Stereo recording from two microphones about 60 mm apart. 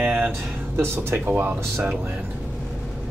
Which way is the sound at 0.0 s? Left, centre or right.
Right.